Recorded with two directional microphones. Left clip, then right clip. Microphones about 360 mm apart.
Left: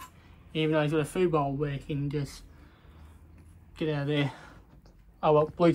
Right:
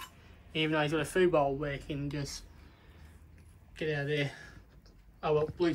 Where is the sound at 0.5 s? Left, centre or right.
Left.